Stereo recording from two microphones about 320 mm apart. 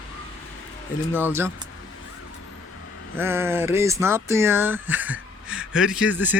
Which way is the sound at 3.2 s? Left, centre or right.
Centre.